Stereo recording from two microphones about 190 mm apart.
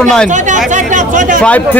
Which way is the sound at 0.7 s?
40° right (ahead or behind).